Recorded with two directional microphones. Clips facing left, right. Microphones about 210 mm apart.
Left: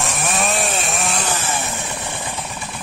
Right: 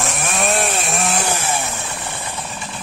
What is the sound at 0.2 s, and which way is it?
Chainsaw, centre (ahead or behind).